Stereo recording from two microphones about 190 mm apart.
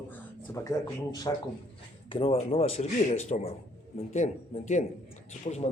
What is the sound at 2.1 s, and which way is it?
Speech, 30° left (ahead or behind).